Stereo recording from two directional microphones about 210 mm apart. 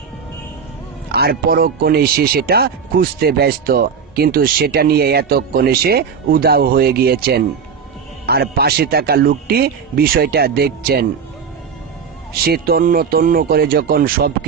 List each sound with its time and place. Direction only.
1.1 s speech: 45° right (ahead or behind)
12.5 s speech: 45° right (ahead or behind)